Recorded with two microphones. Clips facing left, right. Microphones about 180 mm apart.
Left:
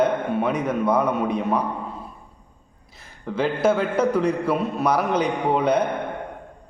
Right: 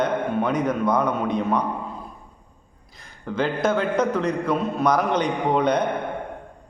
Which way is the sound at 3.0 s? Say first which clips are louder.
Even; 5° left (ahead or behind).